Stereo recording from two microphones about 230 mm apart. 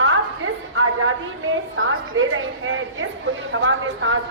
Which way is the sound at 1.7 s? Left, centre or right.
Right.